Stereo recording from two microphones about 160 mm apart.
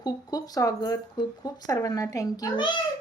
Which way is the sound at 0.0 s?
25° left (ahead or behind).